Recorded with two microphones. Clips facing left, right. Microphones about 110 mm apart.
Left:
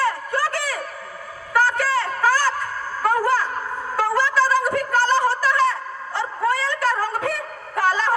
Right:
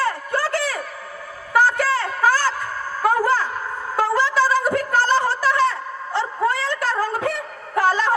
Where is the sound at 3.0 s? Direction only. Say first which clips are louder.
Right 1 dB; 15° right (ahead or behind).